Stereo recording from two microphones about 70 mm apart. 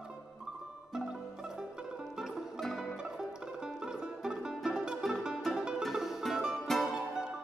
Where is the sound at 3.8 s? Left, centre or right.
Centre.